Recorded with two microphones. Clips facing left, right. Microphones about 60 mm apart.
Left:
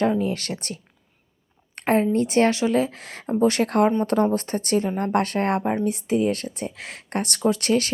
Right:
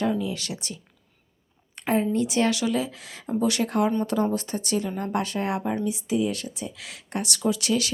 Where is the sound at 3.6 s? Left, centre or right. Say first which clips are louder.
Left 4 dB; left.